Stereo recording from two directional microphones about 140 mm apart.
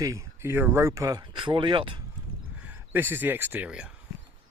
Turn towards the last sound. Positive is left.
turn(degrees=-5)  # may be behind; listen again after turning